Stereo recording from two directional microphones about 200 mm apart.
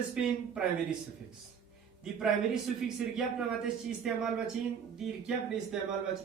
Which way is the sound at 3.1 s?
Centre (ahead or behind).